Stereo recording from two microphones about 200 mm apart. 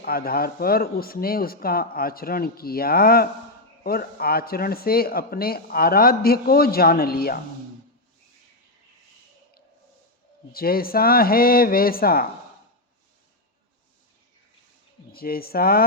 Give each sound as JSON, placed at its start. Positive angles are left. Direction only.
{"t": 0.0, "sound": "speech", "side_deg": 50}
{"t": 10.5, "sound": "speech", "side_deg": 50}
{"t": 15.1, "sound": "speech", "side_deg": 50}